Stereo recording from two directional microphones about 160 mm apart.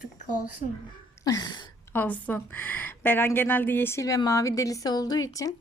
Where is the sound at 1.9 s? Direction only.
10° left (ahead or behind).